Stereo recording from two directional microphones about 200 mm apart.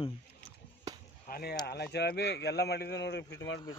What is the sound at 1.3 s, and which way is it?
Speech, 50° left (ahead or behind).